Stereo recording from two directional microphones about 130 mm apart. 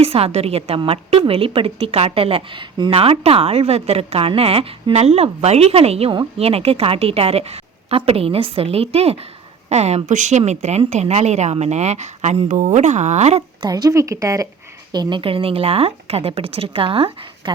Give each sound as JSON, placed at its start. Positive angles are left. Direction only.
{"t": 0.0, "sound": "a woman's voice", "side_deg": -50}
{"t": 13.6, "sound": "speech", "side_deg": -30}
{"t": 14.9, "sound": "a woman's voice", "side_deg": -40}